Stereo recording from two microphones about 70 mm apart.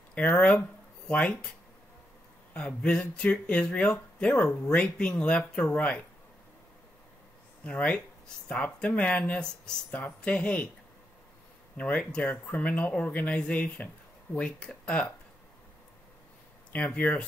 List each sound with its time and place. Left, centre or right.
0.1 s speech: centre
2.5 s speech: centre
7.6 s speech: centre
9.8 s speech: left
11.7 s speech: centre
16.7 s speech: centre